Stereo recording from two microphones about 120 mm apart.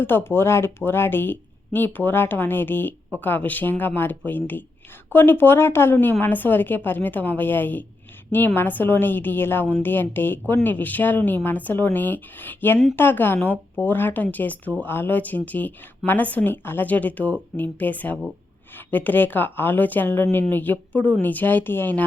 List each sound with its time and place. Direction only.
0.0 s a woman's voice: 20° left (ahead or behind)